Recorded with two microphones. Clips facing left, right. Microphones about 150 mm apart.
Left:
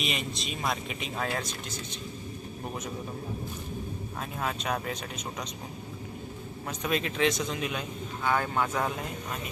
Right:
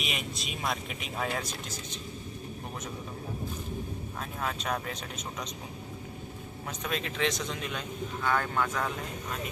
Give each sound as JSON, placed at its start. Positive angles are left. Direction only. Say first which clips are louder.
{"t": 0.0, "sound": "speech", "louder": "left 3 dB", "side_deg": -5}
{"t": 4.2, "sound": "speech", "louder": "left 2 dB", "side_deg": 5}
{"t": 6.8, "sound": "speech", "louder": "left 4 dB", "side_deg": 5}
{"t": 8.6, "sound": "speech", "louder": "left 2 dB", "side_deg": 25}